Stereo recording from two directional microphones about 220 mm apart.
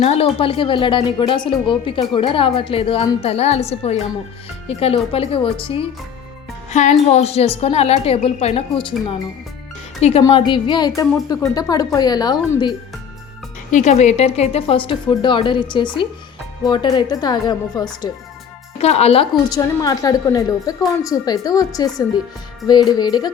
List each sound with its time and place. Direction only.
0.0 s a woman's voice: 30° left (ahead or behind)
13.7 s a woman's voice: 35° left (ahead or behind)
18.8 s a woman's voice: 30° left (ahead or behind)